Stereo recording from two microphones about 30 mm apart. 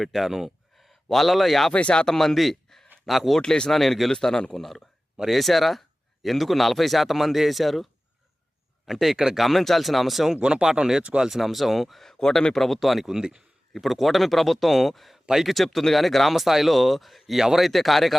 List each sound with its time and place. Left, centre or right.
0.0 s speech: centre
1.0 s a man's voice: centre
1.7 s speech: left
2.0 s speech: centre
3.4 s a man's voice: left
3.7 s speech: centre
4.1 s a man's voice: left
4.5 s speech: centre
8.9 s speech: centre
9.4 s speech: centre
10.4 s speech: right
11.3 s speech: centre
12.2 s a man's voice: centre